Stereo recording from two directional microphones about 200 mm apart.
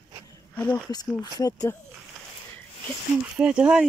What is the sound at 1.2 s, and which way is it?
Speech, 20° left (ahead or behind).